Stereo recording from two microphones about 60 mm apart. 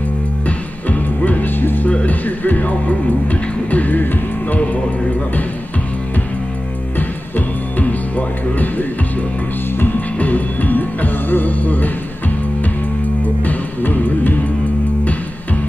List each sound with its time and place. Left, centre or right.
0.5 s music: left
7.0 s music: left
13.2 s music: left